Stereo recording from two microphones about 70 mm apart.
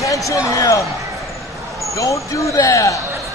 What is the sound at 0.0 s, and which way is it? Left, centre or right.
Speech, left.